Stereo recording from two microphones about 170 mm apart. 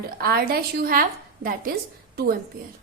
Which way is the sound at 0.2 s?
60° right (ahead or behind).